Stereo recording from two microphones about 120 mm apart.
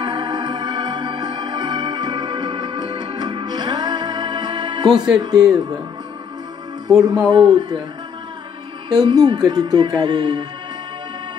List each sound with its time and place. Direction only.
0.0 s music: 40° right (ahead or behind)
5.2 s speech: 30° right (ahead or behind)
7.0 s speech: 30° right (ahead or behind)
8.8 s speech: 35° right (ahead or behind)